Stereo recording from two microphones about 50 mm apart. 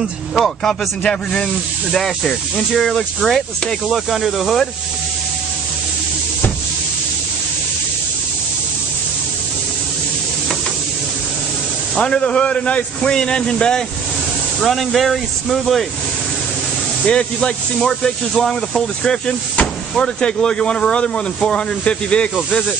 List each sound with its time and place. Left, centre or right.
1.0 s speech: left
1.9 s speech: centre
12.0 s speech: centre
14.6 s speech: centre
17.0 s speech: centre